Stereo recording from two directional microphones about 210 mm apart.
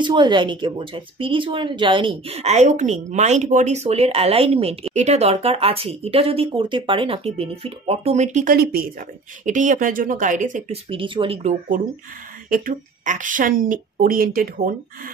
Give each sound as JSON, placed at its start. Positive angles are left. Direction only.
{"t": 0.0, "sound": "speech", "side_deg": -20}
{"t": 10.9, "sound": "speech", "side_deg": -25}
{"t": 12.4, "sound": "speech", "side_deg": -40}